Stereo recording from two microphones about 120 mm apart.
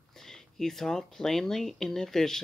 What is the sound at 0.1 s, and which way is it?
Speech, 5° left (ahead or behind).